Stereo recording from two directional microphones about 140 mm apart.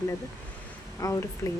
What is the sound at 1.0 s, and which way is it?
Speech, 20° left (ahead or behind).